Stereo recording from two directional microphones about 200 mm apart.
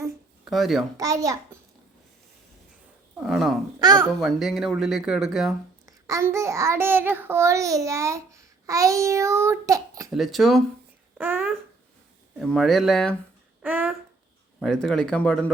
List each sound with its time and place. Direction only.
0.4 s speech: centre (ahead or behind)
0.9 s a child's voice: 15° right (ahead or behind)
3.2 s speech: centre (ahead or behind)
3.8 s a child's voice: 20° right (ahead or behind)
4.2 s speech: centre (ahead or behind)
5.8 s a child's voice: 15° right (ahead or behind)
10.1 s a child's voice: centre (ahead or behind)
12.4 s speech: centre (ahead or behind)
13.6 s a sound: 10° right (ahead or behind)
14.6 s speech: 5° left (ahead or behind)